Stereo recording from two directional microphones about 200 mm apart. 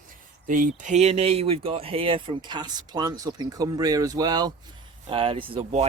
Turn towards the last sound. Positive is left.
turn(degrees=-35)  # may be behind; listen again after turning